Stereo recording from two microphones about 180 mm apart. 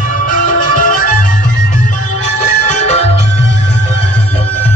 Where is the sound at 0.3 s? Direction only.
45° left (ahead or behind).